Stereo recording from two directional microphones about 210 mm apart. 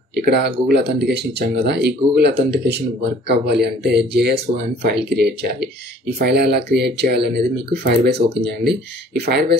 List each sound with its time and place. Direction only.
0.1 s speech: 50° right (ahead or behind)